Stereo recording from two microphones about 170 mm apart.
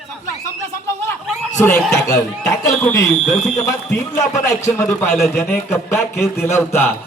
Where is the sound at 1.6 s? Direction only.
15° left (ahead or behind).